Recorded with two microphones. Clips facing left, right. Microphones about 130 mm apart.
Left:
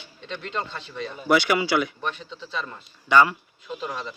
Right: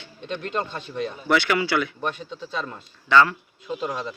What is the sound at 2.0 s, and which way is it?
Speech, 40° right (ahead or behind).